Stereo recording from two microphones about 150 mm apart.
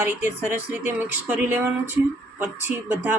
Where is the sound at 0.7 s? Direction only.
10° right (ahead or behind).